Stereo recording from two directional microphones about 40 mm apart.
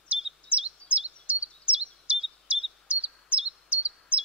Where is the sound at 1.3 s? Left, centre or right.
Right.